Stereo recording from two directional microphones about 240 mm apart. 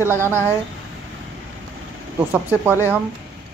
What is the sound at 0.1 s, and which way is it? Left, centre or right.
Speech, centre.